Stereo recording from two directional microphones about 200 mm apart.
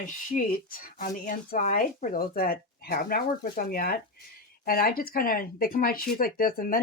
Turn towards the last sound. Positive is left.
turn(degrees=45)  # may be behind; listen again after turning